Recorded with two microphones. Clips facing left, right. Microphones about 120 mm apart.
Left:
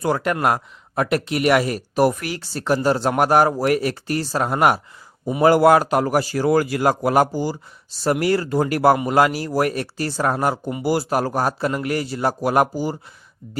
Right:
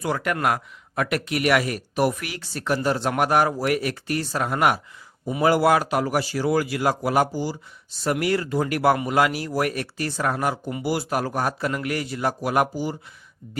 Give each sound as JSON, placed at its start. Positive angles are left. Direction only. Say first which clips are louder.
{"t": 0.0, "sound": "speech", "louder": "left 4 dB", "side_deg": 35}
{"t": 5.4, "sound": "a man's voice", "louder": "left 5 dB", "side_deg": 45}
{"t": 7.9, "sound": "speech", "louder": "left 4 dB", "side_deg": 35}